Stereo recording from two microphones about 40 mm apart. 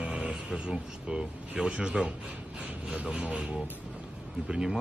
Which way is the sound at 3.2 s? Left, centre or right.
Right.